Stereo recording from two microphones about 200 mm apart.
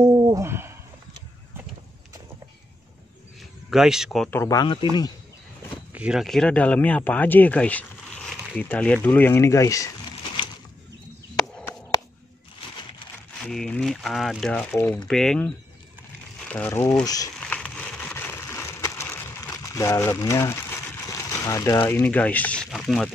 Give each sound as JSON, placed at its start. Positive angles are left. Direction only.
{"t": 0.0, "sound": "owl", "side_deg": -15}
{"t": 3.7, "sound": "speech", "side_deg": 0}
{"t": 4.4, "sound": "speech", "side_deg": 20}
{"t": 5.9, "sound": "speech", "side_deg": -5}
{"t": 11.3, "sound": "a sound", "side_deg": 5}
{"t": 13.5, "sound": "speech", "side_deg": 5}
{"t": 17.4, "sound": "a sound", "side_deg": 5}